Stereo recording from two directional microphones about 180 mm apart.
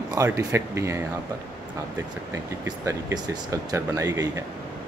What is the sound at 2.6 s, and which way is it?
Speech, 15° right (ahead or behind).